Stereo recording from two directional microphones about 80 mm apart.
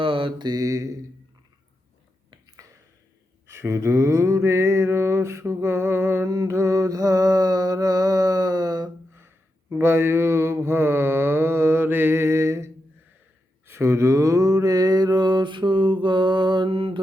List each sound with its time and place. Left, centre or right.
0.0 s mantra: right
3.4 s a sound: right
6.3 s mantra: right
9.8 s mantra: right